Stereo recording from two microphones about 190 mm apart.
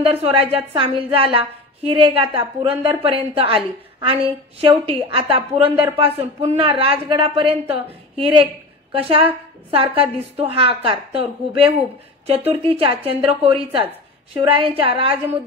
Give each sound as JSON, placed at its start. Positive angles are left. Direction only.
{"t": 0.0, "sound": "a woman's voice", "side_deg": -30}